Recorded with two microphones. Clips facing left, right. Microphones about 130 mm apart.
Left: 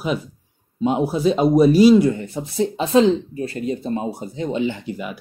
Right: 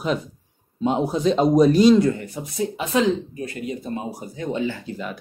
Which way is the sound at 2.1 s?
25° left (ahead or behind).